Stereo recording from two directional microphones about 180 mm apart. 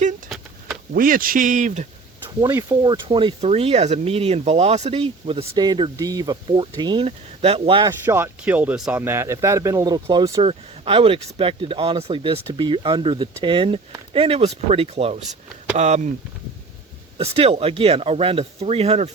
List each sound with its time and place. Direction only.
0.9 s a man's voice: 50° right (ahead or behind)
2.4 s speech: 15° right (ahead or behind)
2.8 s speech: 25° right (ahead or behind)
8.0 s speech: 10° right (ahead or behind)
10.4 s speech: 30° right (ahead or behind)
17.2 s speech: 35° right (ahead or behind)